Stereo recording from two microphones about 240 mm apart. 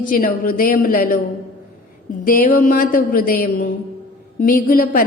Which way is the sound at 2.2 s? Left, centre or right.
Left.